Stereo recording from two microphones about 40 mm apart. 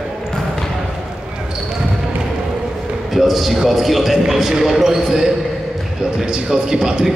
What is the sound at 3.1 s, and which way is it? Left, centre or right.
A man's voice, centre.